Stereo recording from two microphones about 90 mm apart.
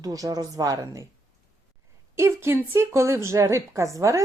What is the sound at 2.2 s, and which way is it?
Speech, 30° right (ahead or behind).